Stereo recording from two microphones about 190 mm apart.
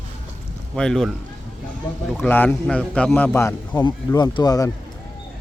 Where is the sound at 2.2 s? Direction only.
10° left (ahead or behind).